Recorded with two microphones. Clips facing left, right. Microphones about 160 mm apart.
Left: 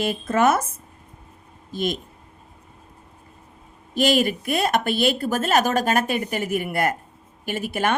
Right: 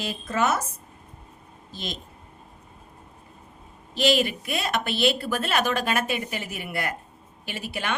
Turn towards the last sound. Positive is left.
turn(degrees=45)  # may be behind; listen again after turning